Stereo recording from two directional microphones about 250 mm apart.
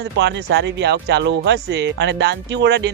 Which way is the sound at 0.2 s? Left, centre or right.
Right.